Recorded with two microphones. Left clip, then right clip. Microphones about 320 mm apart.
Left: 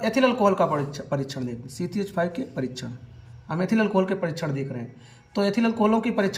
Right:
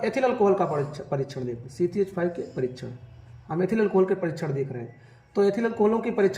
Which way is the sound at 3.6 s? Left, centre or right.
Left.